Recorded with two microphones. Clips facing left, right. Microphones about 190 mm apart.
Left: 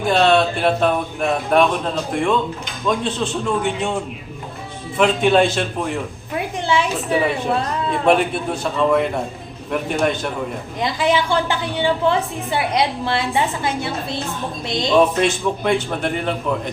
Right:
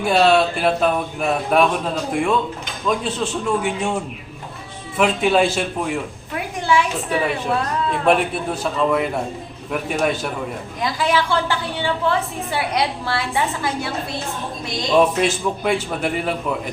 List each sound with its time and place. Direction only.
0.0 s speech: 5° right (ahead or behind)
4.9 s speech: 5° right (ahead or behind)
6.6 s a woman's voice: 25° left (ahead or behind)
7.1 s speech: centre (ahead or behind)
10.8 s a woman's voice: 20° left (ahead or behind)
14.9 s speech: 5° right (ahead or behind)